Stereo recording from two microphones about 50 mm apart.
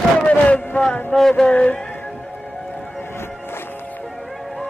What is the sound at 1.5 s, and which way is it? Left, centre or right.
Music, left.